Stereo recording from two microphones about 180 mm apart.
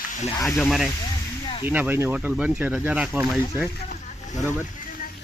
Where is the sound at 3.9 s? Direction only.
45° left (ahead or behind).